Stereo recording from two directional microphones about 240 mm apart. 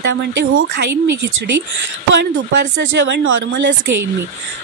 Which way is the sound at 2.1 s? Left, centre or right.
Right.